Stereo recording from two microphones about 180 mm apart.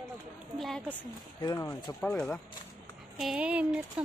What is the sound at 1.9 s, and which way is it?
Speech, 5° left (ahead or behind).